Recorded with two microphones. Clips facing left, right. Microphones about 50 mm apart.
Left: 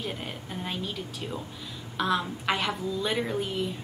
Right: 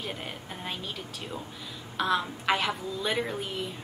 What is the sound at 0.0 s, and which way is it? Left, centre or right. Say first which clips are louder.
A woman's voice: left 2 dB; centre.